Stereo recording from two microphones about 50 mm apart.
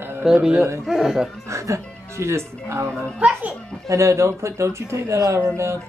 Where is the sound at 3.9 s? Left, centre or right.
Right.